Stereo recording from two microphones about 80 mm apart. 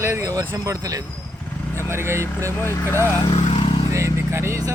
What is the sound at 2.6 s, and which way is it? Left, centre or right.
Speech, left.